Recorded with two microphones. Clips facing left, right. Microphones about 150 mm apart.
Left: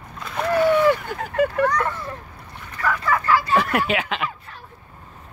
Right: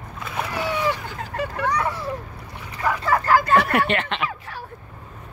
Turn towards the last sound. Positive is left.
turn(degrees=5)  # may be behind; listen again after turning